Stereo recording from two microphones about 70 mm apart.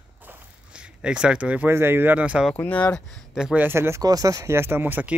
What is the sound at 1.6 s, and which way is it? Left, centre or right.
Speech, right.